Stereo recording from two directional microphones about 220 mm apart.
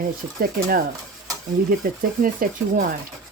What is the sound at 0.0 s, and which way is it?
Cutlery, 40° right (ahead or behind).